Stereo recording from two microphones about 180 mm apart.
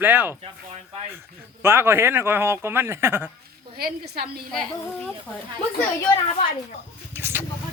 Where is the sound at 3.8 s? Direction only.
60° right (ahead or behind).